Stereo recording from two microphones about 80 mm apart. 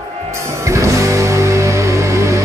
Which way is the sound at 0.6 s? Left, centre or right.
Right.